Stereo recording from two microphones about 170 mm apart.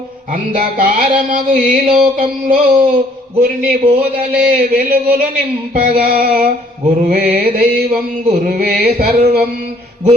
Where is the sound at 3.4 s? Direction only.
60° right (ahead or behind).